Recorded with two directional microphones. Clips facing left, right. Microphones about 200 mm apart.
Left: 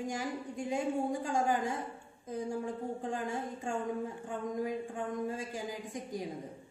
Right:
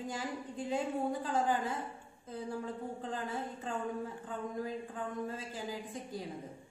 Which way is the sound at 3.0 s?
15° left (ahead or behind).